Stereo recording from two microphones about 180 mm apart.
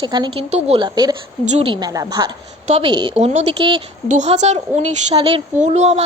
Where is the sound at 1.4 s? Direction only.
35° right (ahead or behind).